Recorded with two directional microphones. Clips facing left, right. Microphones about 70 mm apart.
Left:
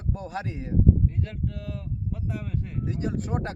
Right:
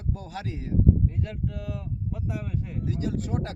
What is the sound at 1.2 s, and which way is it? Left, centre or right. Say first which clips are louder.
Speech: right 1 dB; centre.